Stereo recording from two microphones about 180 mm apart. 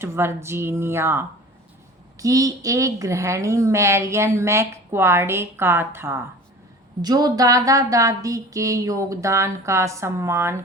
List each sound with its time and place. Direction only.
0.0 s a woman's voice: 15° right (ahead or behind)